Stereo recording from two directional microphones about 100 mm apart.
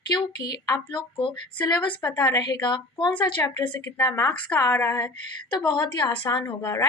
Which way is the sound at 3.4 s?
25° left (ahead or behind).